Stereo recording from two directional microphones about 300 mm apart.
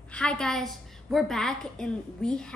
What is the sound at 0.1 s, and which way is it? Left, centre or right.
A woman's voice, centre.